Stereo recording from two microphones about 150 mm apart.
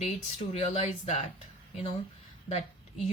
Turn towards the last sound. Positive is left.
turn(degrees=45)  # may be behind; listen again after turning